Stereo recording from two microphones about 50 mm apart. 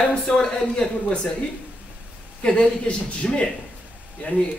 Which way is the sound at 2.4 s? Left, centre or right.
Left.